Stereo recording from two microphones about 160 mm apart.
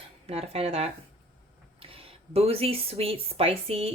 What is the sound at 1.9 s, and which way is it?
Speech, 35° right (ahead or behind).